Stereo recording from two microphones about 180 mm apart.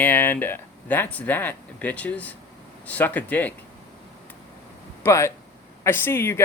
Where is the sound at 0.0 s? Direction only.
10° left (ahead or behind).